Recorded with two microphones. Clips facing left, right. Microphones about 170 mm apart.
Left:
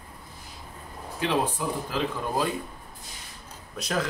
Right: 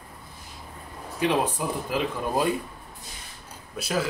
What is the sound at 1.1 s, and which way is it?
Speech, 15° right (ahead or behind).